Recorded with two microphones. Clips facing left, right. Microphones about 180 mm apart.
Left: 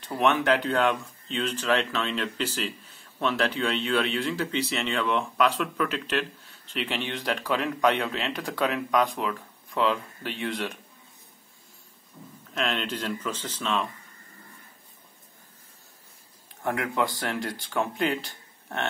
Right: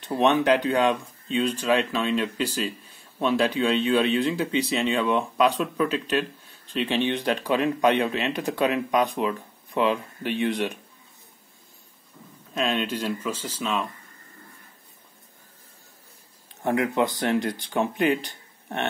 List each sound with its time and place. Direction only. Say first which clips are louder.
0.0 s speech: right 3 dB; 20° right (ahead or behind)
12.5 s speech: right 4 dB; 15° right (ahead or behind)
16.6 s speech: right 4 dB; 20° right (ahead or behind)